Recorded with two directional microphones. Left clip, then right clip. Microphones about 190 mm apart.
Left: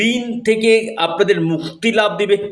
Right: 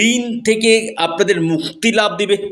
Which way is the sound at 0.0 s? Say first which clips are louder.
Right 2 dB; 30° right (ahead or behind).